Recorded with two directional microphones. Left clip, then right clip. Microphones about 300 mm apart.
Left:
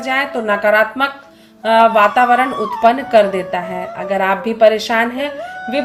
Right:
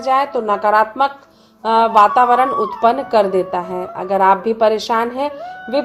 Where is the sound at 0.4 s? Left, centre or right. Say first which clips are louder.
Left 1 dB; right.